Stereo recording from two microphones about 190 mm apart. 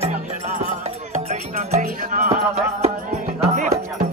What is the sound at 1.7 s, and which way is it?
Music, 45° right (ahead or behind).